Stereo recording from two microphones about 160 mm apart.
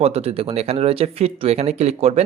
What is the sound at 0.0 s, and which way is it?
Speech, 40° right (ahead or behind).